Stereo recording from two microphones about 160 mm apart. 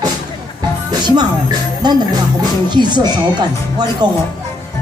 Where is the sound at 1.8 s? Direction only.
25° right (ahead or behind).